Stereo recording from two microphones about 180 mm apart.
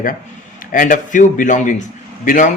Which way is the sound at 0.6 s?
50° left (ahead or behind).